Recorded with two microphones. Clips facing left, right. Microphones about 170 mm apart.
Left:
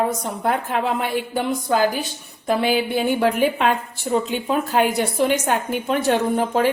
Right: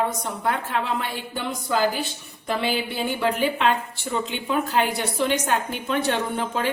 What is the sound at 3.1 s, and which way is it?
A woman's voice, 50° left (ahead or behind).